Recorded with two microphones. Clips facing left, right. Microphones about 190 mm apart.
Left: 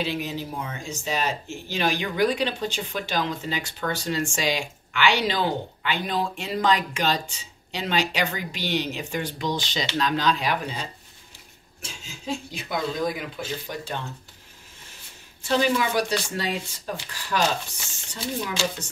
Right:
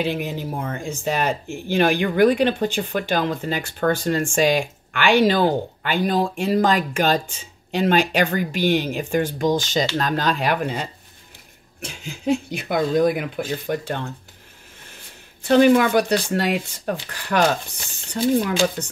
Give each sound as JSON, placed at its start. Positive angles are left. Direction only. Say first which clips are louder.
{"t": 0.0, "sound": "speech", "louder": "right 4 dB", "side_deg": -55}
{"t": 15.4, "sound": "speech", "louder": "right 9 dB", "side_deg": -60}